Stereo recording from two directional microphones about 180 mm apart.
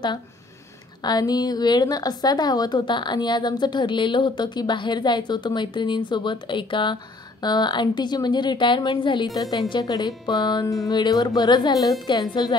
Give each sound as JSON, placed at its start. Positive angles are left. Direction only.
{"t": 1.0, "sound": "a woman's voice", "side_deg": 20}